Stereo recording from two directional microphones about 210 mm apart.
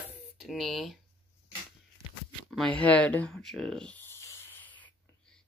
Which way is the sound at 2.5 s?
5° left (ahead or behind).